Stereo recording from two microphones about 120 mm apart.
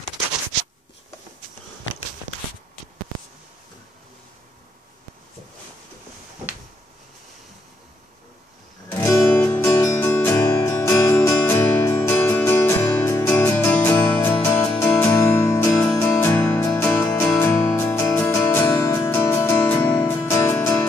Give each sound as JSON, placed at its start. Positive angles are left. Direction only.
{"t": 8.9, "sound": "music", "side_deg": 25}
{"t": 9.5, "sound": "music", "side_deg": 15}
{"t": 10.0, "sound": "music", "side_deg": 25}
{"t": 13.7, "sound": "music", "side_deg": 10}
{"t": 20.2, "sound": "music", "side_deg": 25}